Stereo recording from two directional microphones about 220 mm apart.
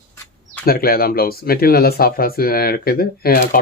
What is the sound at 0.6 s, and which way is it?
Speech, 45° left (ahead or behind).